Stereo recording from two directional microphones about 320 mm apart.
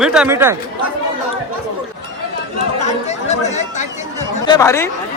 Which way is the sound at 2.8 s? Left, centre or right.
Left.